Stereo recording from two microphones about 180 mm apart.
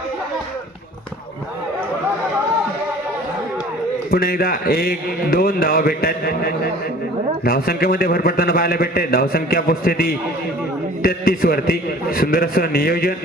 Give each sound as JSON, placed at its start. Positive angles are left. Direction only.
{"t": 4.1, "sound": "a man's voice", "side_deg": 55}